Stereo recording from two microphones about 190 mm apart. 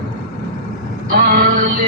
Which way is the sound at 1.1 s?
50° right (ahead or behind).